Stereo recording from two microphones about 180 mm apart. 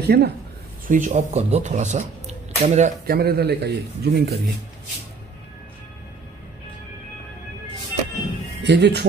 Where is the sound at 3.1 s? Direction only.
60° right (ahead or behind).